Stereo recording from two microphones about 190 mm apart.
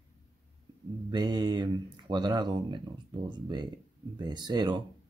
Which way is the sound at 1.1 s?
20° right (ahead or behind).